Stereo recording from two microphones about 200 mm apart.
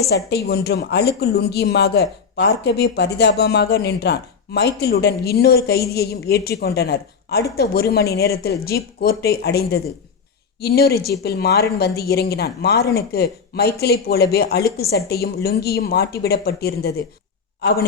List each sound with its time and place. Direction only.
0.1 s a woman's voice: 55° left (ahead or behind)